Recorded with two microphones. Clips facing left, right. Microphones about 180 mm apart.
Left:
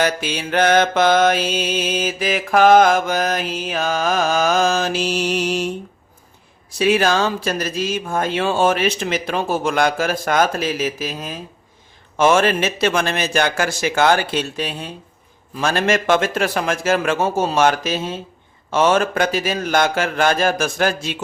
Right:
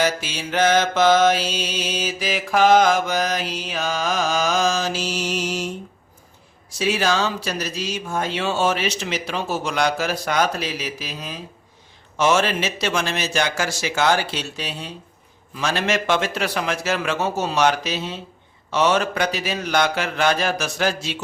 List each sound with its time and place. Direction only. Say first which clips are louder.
0.0 s mantra: left 2 dB; 60° left (ahead or behind)
6.7 s speech: left 4 dB; 55° left (ahead or behind)